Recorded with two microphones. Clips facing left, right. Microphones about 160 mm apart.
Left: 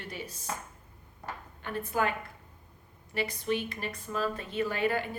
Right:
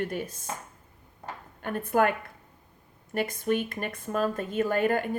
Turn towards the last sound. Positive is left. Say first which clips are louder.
# right 4 dB
turn(degrees=-50)  # may be behind; listen again after turning